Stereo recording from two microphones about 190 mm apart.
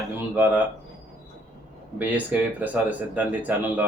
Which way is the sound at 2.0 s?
10° right (ahead or behind).